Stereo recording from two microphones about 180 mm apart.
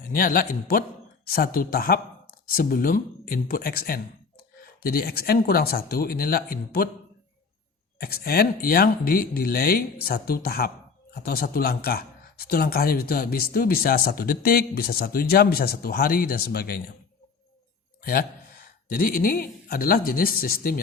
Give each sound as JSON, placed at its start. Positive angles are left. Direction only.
{"t": 0.1, "sound": "speech", "side_deg": 50}
{"t": 7.9, "sound": "speech", "side_deg": 55}
{"t": 18.0, "sound": "a man's voice", "side_deg": 55}